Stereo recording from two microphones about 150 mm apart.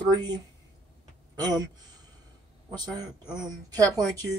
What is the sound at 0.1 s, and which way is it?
Speech, 25° right (ahead or behind).